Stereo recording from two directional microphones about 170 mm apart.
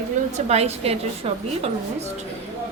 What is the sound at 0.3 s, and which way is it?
A woman's voice, 40° right (ahead or behind).